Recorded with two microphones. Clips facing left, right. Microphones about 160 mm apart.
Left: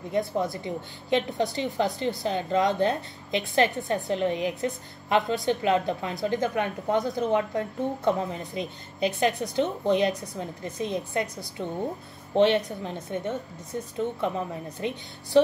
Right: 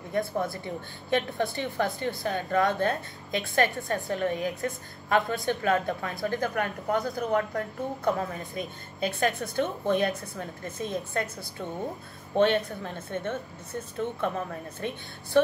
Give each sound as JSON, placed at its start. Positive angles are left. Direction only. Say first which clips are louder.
{"t": 0.1, "sound": "a woman's voice", "louder": "left 2 dB", "side_deg": 20}